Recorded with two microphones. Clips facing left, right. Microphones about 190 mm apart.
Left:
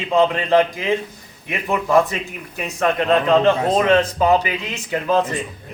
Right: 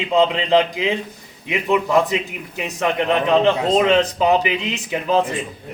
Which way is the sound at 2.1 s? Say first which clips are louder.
Right 4 dB; 15° right (ahead or behind).